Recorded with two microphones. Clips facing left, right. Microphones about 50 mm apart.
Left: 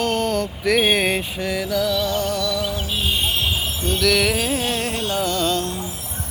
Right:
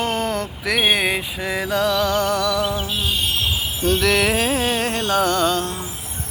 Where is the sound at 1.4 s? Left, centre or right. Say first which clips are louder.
Right 2 dB; right.